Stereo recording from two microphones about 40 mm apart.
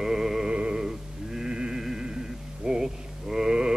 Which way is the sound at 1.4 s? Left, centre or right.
Centre.